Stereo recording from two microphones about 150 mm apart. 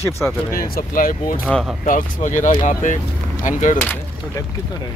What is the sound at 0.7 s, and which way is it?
Speech, 70° left (ahead or behind).